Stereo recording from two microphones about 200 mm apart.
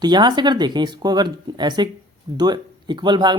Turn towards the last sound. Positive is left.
turn(degrees=-20)  # may be behind; listen again after turning